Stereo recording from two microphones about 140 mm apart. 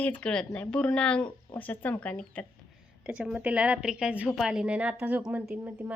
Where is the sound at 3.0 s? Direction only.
5° right (ahead or behind).